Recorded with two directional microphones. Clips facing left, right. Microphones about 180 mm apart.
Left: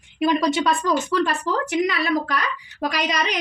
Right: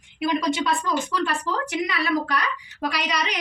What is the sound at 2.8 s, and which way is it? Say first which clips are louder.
Speech: left 2 dB; 40° left (ahead or behind).